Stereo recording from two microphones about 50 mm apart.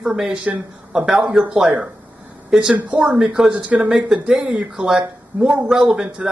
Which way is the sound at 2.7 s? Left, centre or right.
Right.